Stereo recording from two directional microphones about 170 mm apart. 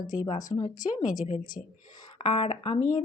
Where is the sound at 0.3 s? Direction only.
50° left (ahead or behind).